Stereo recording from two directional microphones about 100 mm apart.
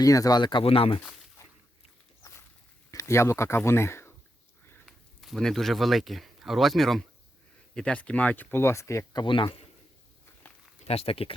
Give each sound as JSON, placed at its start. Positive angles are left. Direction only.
{"t": 0.0, "sound": "speech", "side_deg": 35}
{"t": 0.6, "sound": "speech", "side_deg": 70}
{"t": 1.4, "sound": "a sound", "side_deg": 30}
{"t": 2.9, "sound": "speech", "side_deg": 30}
{"t": 4.9, "sound": "speech", "side_deg": 0}
{"t": 9.2, "sound": "speech", "side_deg": 55}
{"t": 10.8, "sound": "speech", "side_deg": 90}